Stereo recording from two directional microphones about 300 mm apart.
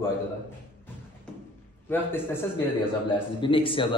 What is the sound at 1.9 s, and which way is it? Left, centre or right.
Speech, centre.